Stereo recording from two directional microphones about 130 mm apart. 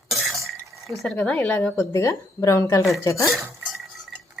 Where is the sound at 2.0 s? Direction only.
20° left (ahead or behind).